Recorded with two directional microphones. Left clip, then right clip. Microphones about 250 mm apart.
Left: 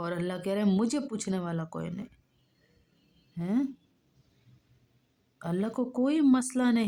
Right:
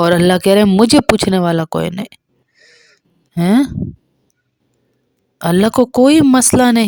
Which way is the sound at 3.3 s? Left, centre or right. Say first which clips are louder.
Right 18 dB; right.